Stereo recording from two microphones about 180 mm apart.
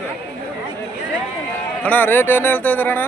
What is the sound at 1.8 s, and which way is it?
Speech, 10° left (ahead or behind).